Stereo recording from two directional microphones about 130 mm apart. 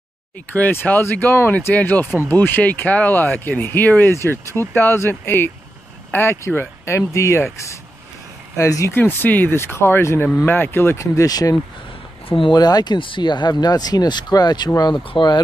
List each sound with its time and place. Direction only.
0.5 s speech: 15° left (ahead or behind)
8.5 s speech: 25° left (ahead or behind)
12.3 s speech: 40° left (ahead or behind)